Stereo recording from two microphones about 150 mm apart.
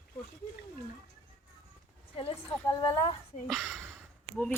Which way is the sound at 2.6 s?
25° left (ahead or behind).